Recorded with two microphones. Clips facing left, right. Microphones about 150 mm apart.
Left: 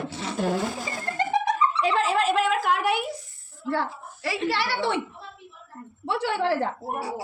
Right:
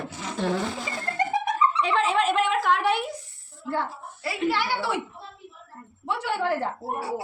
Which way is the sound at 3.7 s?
90° left.